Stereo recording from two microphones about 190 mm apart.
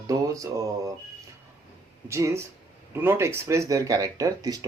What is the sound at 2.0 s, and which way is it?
Speech, 15° right (ahead or behind).